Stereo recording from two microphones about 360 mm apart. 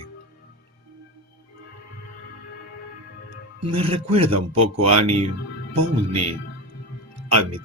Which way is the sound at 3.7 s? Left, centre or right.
Centre.